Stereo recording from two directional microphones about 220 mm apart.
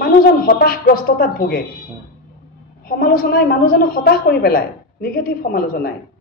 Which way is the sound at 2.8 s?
40° left (ahead or behind).